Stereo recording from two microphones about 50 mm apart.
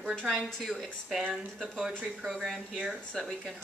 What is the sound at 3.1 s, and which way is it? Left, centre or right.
Speech, centre.